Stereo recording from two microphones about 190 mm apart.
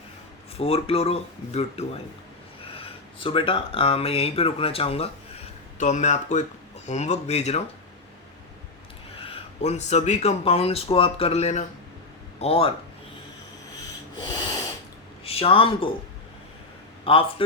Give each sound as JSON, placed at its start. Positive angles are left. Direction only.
{"t": 0.5, "sound": "speech", "side_deg": 30}
{"t": 9.3, "sound": "speech", "side_deg": 35}
{"t": 15.2, "sound": "speech", "side_deg": 30}
{"t": 17.0, "sound": "a man's voice", "side_deg": 30}